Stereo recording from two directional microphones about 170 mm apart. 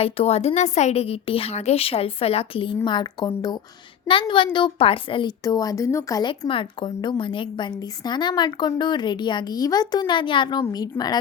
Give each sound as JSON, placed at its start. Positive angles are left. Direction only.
{"t": 0.0, "sound": "a woman's voice", "side_deg": 35}